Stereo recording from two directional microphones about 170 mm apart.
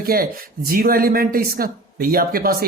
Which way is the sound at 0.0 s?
60° right (ahead or behind).